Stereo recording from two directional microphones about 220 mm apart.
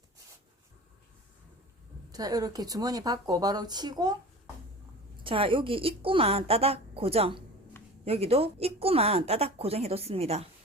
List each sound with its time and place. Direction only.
2.1 s speech: 15° right (ahead or behind)
5.2 s a woman's voice: 25° right (ahead or behind)